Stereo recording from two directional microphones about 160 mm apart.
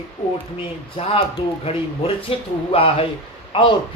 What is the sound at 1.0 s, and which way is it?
Speech, 30° left (ahead or behind).